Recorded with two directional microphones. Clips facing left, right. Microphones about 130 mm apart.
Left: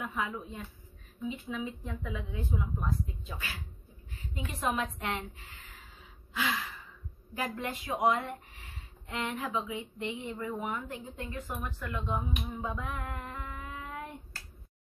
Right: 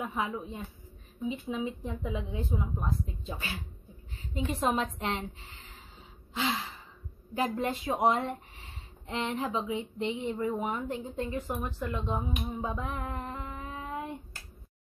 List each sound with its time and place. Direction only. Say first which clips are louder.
0.0 s a woman's voice: right 2 dB; 25° right (ahead or behind)
6.3 s gasp: right 2 dB; 25° right (ahead or behind)
7.3 s speech: right 5 dB; 25° right (ahead or behind)